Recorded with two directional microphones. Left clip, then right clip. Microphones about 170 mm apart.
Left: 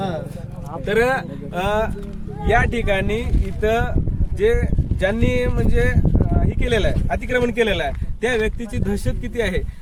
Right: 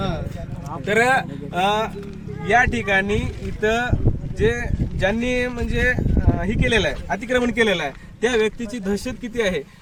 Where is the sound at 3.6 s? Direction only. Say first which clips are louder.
Left 1 dB; 20° left (ahead or behind).